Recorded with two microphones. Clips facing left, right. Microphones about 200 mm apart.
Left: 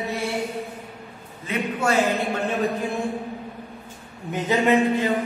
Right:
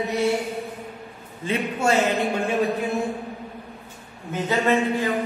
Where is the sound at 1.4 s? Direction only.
25° right (ahead or behind).